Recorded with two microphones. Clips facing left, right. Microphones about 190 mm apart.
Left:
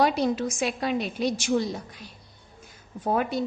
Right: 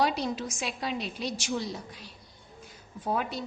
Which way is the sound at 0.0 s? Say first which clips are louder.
Left 5 dB; 55° left (ahead or behind).